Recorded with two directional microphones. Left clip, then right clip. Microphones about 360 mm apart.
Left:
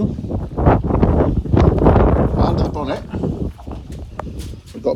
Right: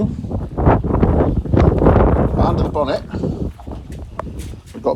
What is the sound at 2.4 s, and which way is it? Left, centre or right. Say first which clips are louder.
Speech: right 1 dB; centre.